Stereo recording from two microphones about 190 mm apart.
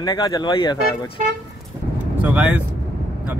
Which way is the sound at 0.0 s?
20° left (ahead or behind).